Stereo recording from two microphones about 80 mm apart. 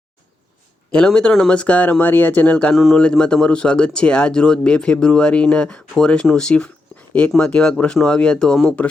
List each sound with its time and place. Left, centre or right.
0.9 s speech: centre
2.7 s speech: centre